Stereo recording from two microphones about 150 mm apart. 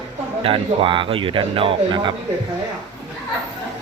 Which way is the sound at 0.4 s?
35° right (ahead or behind).